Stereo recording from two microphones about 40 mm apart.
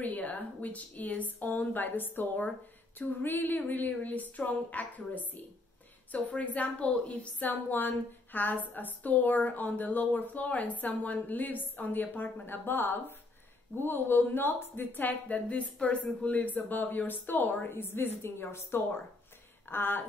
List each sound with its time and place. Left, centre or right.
0.0 s a woman's voice: left
7.4 s a woman's voice: left